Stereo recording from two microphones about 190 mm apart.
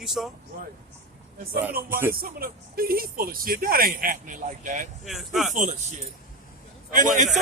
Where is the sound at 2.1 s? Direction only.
50° right (ahead or behind).